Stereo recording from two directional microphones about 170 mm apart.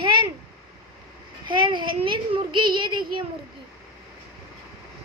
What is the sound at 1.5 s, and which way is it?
A child's voice, 30° right (ahead or behind).